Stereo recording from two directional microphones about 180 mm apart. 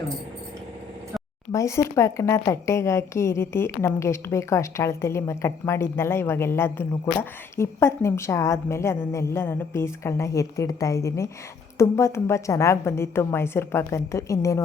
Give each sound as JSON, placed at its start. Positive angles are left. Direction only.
{"t": 1.5, "sound": "a woman's voice", "side_deg": 15}